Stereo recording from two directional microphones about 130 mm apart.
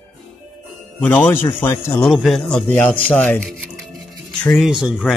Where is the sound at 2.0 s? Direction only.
Centre (ahead or behind).